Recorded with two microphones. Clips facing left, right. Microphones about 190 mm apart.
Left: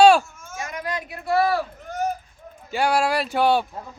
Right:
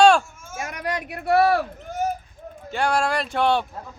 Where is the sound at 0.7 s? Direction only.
65° right (ahead or behind).